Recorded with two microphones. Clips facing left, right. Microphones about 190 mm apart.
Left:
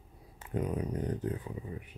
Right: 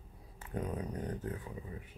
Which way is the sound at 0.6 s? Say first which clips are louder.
Left 5 dB; 20° left (ahead or behind).